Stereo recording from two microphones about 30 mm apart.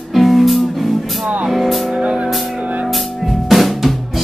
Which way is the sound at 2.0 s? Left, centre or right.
Right.